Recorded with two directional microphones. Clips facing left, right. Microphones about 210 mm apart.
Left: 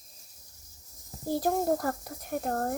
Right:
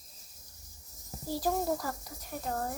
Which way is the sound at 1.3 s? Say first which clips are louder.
Left 4 dB; 55° left (ahead or behind).